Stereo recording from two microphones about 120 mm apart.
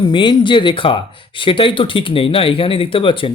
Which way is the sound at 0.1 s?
45° left (ahead or behind).